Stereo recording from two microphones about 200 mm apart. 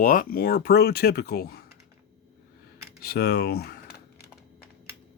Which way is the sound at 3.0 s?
50° left (ahead or behind).